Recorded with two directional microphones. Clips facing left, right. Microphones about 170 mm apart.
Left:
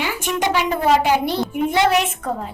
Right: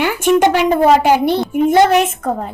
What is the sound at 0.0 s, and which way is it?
A woman's voice, 55° right (ahead or behind).